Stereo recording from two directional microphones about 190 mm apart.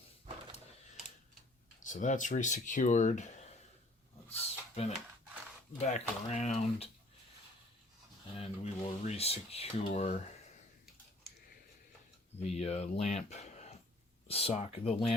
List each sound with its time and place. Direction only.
1.8 s speech: 40° left (ahead or behind)
4.3 s a sound: 35° left (ahead or behind)
5.8 s speech: 35° left (ahead or behind)
8.4 s speech: 30° left (ahead or behind)
12.4 s speech: 35° left (ahead or behind)